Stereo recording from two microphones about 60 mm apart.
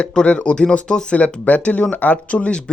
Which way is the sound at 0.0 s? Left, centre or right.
Centre.